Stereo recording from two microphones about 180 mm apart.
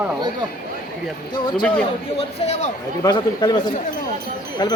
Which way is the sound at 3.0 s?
25° left (ahead or behind).